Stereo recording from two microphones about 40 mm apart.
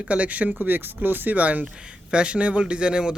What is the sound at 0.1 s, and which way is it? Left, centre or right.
Speech, right.